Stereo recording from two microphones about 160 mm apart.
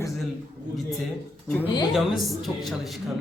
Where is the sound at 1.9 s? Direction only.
Centre (ahead or behind).